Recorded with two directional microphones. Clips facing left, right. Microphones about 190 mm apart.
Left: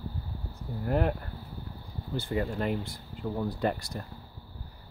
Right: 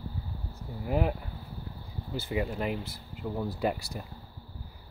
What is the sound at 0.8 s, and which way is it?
Speech, 5° right (ahead or behind).